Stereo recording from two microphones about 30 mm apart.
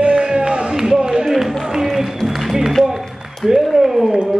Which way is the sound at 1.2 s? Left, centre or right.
Centre.